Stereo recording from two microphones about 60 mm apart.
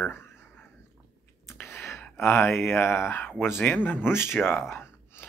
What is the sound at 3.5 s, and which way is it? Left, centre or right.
Speech, left.